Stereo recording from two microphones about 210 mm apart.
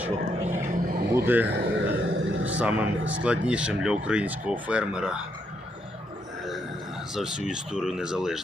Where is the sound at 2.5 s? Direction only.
5° right (ahead or behind).